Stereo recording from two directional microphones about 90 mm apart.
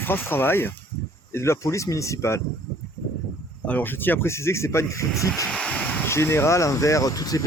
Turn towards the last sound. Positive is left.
turn(degrees=45)  # may be behind; listen again after turning